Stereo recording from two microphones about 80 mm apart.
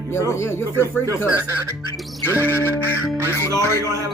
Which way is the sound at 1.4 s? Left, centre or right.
Right.